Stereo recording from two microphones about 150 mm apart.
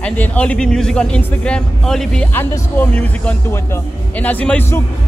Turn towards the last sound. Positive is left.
turn(degrees=15)  # may be behind; listen again after turning